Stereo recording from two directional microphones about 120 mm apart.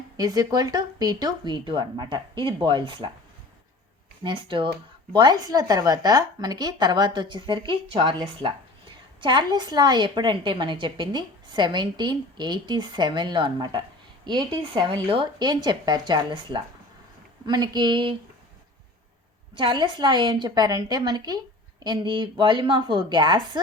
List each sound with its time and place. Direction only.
0.2 s a woman's voice: 30° right (ahead or behind)
4.2 s a woman's voice: 40° right (ahead or behind)
9.2 s a woman's voice: 40° right (ahead or behind)
19.5 s a woman's voice: 40° right (ahead or behind)